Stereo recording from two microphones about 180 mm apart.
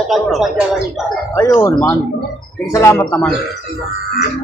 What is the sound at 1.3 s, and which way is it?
A man's voice, 10° left (ahead or behind).